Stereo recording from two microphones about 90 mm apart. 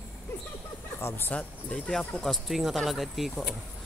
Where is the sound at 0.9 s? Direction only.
25° left (ahead or behind).